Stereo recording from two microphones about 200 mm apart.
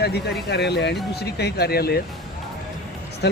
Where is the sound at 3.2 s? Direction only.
55° left (ahead or behind).